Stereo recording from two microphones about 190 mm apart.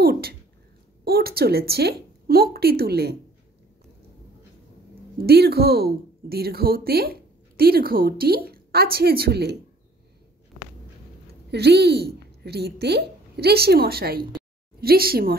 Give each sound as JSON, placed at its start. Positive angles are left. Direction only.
{"t": 0.0, "sound": "a sound", "side_deg": -55}
{"t": 1.0, "sound": "a woman's voice", "side_deg": -55}
{"t": 5.2, "sound": "speech", "side_deg": -55}
{"t": 11.5, "sound": "a woman's voice", "side_deg": -60}